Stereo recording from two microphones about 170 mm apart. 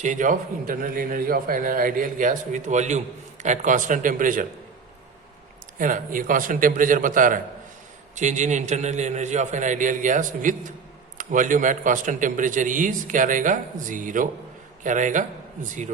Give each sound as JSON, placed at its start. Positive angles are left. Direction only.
{"t": 0.0, "sound": "a man's voice", "side_deg": -50}
{"t": 5.8, "sound": "a man's voice", "side_deg": -55}